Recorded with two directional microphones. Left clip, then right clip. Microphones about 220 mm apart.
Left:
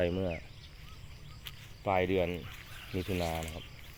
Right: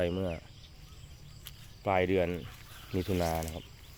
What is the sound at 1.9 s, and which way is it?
Speech, 15° right (ahead or behind).